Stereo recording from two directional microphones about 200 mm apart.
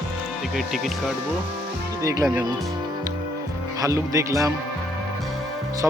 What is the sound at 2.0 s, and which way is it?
Speech, 15° right (ahead or behind).